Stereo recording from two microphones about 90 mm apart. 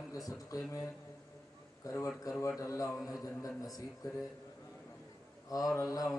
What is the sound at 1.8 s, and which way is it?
A man's voice, 40° left (ahead or behind).